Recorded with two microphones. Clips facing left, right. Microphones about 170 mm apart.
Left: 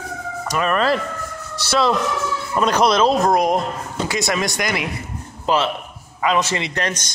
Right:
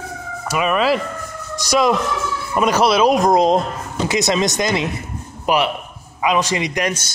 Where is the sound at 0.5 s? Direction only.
10° right (ahead or behind).